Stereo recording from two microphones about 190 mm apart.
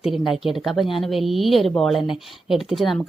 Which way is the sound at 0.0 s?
Centre (ahead or behind).